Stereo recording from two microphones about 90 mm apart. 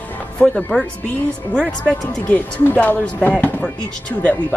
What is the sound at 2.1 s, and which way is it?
Speech, 15° left (ahead or behind).